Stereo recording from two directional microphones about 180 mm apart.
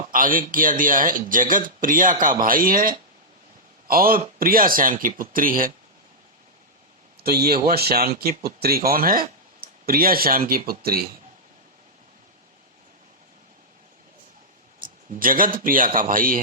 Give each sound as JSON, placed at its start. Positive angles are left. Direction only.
{"t": 0.0, "sound": "a man's voice", "side_deg": -50}
{"t": 7.3, "sound": "speech", "side_deg": -60}
{"t": 14.8, "sound": "a man's voice", "side_deg": -50}